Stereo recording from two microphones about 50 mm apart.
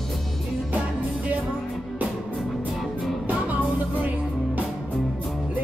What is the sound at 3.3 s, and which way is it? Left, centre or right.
Music, right.